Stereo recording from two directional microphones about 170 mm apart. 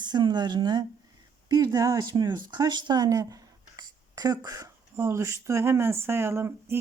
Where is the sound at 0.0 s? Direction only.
25° right (ahead or behind).